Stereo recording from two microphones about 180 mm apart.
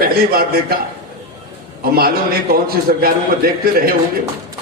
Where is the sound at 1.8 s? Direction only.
55° right (ahead or behind).